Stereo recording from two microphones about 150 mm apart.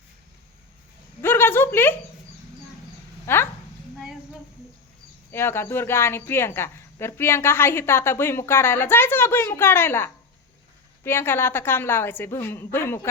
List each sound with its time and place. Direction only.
1.2 s a sound: 15° left (ahead or behind)
3.2 s dog: 15° left (ahead or behind)
5.3 s speech: 15° left (ahead or behind)